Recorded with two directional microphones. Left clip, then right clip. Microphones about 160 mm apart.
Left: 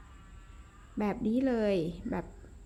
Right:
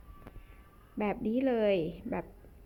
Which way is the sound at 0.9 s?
20° left (ahead or behind).